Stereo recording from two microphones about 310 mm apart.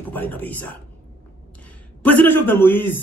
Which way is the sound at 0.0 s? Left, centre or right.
Centre.